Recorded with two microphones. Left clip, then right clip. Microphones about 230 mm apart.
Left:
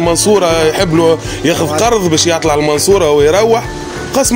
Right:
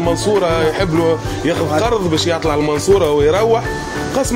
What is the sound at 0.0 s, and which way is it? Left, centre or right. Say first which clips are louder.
A man's voice: left 5 dB; left.